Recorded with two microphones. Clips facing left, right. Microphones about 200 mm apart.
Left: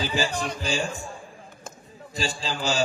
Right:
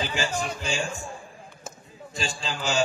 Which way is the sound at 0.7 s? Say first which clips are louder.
Left 3 dB; 35° left (ahead or behind).